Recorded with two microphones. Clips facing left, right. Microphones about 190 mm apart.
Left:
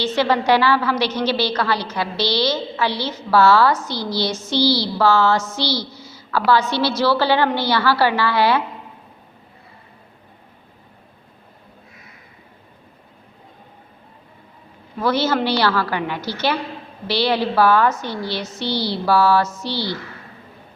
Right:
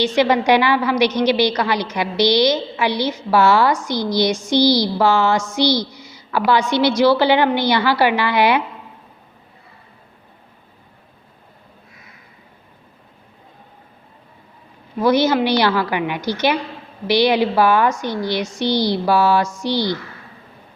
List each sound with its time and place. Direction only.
0.0 s a woman's voice: 15° right (ahead or behind)
15.0 s a woman's voice: 15° right (ahead or behind)